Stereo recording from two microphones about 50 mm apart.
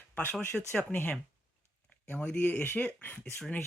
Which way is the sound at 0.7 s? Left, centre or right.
Left.